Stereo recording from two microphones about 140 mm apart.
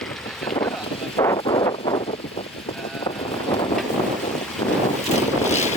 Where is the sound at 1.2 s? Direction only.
30° left (ahead or behind).